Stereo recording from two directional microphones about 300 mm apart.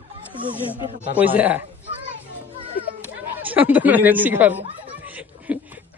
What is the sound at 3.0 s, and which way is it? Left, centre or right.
Speech, centre.